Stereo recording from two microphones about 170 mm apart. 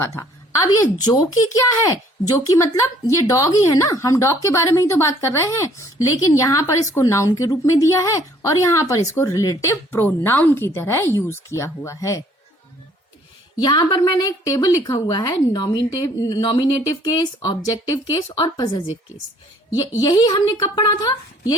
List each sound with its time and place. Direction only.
0.0 s a woman's voice: 15° left (ahead or behind)
1.9 s a woman's voice: 20° left (ahead or behind)
13.6 s a woman's voice: 25° left (ahead or behind)